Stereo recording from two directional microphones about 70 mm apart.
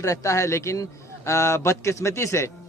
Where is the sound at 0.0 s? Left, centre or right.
Left.